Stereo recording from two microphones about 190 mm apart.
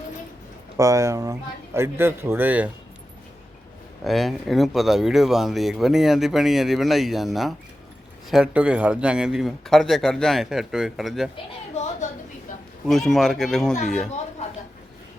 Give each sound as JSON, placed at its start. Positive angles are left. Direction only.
{"t": 0.8, "sound": "a man's voice", "side_deg": -15}
{"t": 4.0, "sound": "speech", "side_deg": 0}
{"t": 12.8, "sound": "speech", "side_deg": 0}